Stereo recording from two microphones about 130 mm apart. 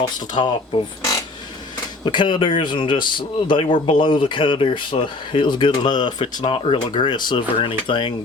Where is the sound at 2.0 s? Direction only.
40° left (ahead or behind).